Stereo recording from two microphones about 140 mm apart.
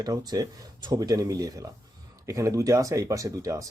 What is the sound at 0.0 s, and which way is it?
Speech, 25° right (ahead or behind).